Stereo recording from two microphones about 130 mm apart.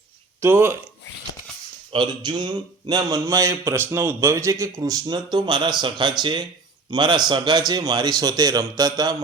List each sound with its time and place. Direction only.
0.4 s speech: 15° right (ahead or behind)
1.9 s speech: 35° right (ahead or behind)